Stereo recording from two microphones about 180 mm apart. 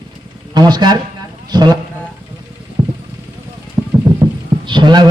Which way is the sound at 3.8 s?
5° right (ahead or behind).